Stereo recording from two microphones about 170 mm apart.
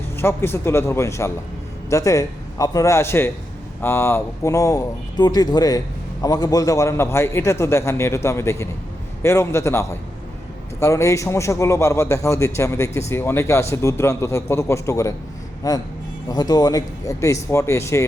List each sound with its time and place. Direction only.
0.2 s a man's voice: 15° left (ahead or behind)